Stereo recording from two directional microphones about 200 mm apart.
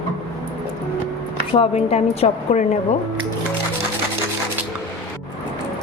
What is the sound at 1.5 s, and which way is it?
A woman's voice, 30° left (ahead or behind).